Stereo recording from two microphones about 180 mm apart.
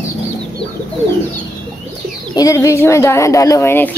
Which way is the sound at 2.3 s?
20° left (ahead or behind).